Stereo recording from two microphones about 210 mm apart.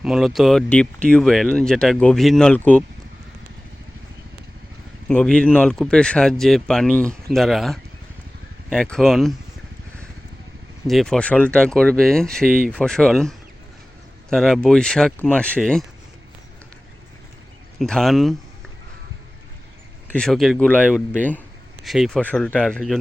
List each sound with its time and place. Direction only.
0.0 s speech: centre (ahead or behind)
5.0 s speech: 5° left (ahead or behind)
10.8 s speech: centre (ahead or behind)
12.5 s speech: 40° right (ahead or behind)
12.7 s speech: 5° left (ahead or behind)
17.7 s speech: centre (ahead or behind)
20.1 s speech: 5° left (ahead or behind)